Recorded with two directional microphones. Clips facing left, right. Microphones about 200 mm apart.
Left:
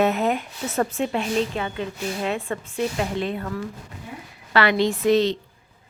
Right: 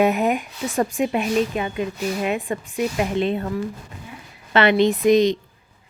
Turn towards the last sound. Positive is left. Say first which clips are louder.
# right 3 dB
turn(degrees=-15)  # may be behind; listen again after turning